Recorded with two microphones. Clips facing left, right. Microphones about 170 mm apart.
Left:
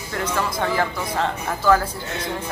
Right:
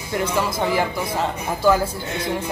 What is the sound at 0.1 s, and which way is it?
Speech, 10° right (ahead or behind).